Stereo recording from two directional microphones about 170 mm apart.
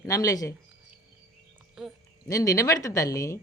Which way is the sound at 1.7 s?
Centre (ahead or behind).